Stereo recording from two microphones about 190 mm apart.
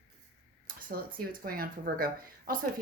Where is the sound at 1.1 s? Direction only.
50° right (ahead or behind).